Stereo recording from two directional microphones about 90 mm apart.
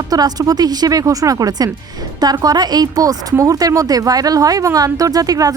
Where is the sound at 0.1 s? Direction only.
45° right (ahead or behind).